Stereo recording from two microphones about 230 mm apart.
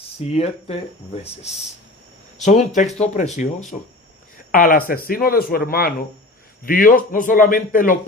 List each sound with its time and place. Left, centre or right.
0.3 s speech: left
4.5 s speech: left